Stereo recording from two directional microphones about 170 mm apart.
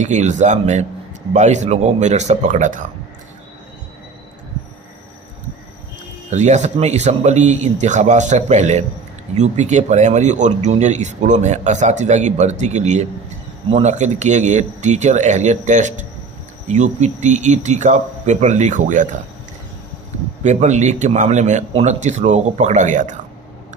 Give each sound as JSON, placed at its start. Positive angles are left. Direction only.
{"t": 0.0, "sound": "speech", "side_deg": -45}
{"t": 6.3, "sound": "speech", "side_deg": -45}
{"t": 20.4, "sound": "speech", "side_deg": -45}